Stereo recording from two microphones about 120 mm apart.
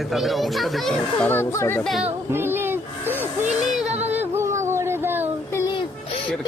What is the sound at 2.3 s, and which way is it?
Speech, 20° right (ahead or behind).